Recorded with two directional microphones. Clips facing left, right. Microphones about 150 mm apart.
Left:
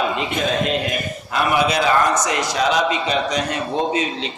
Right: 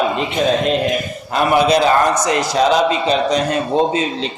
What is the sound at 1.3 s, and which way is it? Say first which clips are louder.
Speech: right 5 dB; 35° right (ahead or behind).